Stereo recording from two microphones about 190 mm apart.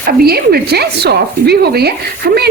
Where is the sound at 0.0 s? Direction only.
55° right (ahead or behind).